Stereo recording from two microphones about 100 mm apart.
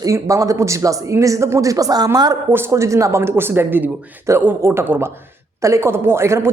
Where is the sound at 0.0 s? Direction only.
35° right (ahead or behind).